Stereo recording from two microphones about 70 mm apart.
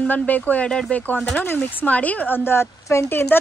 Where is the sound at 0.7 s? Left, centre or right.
Centre.